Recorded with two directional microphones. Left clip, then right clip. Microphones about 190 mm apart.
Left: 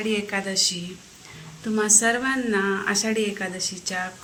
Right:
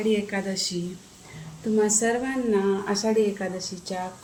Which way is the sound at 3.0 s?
5° left (ahead or behind).